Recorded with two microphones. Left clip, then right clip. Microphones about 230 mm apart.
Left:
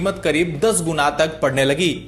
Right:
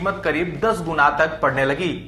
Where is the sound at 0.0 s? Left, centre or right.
Left.